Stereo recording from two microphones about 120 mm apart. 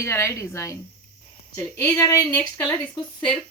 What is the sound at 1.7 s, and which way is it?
Speech, 15° left (ahead or behind).